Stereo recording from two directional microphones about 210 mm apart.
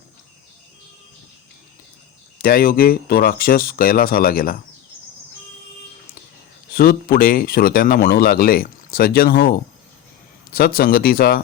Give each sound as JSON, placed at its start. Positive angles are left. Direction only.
{"t": 2.4, "sound": "speech", "side_deg": 45}
{"t": 6.7, "sound": "speech", "side_deg": 45}
{"t": 10.8, "sound": "speech", "side_deg": 45}